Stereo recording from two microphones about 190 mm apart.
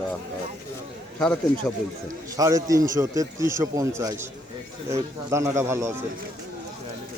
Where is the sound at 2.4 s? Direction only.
20° right (ahead or behind).